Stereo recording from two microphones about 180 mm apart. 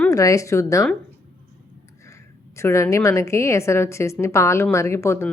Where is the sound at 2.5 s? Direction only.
15° left (ahead or behind).